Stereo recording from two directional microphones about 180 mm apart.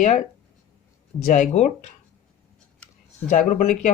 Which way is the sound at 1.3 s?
45° left (ahead or behind).